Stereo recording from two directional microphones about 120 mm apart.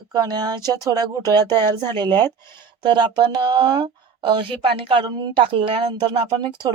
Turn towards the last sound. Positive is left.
turn(degrees=-40)  # may be behind; listen again after turning